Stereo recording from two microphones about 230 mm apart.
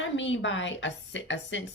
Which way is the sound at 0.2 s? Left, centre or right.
Left.